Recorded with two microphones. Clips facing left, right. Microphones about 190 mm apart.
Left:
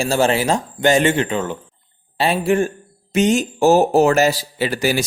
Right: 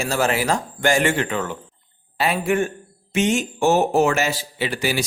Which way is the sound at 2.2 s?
30° left (ahead or behind).